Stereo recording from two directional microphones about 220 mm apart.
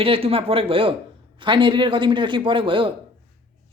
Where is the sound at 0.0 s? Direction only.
25° right (ahead or behind).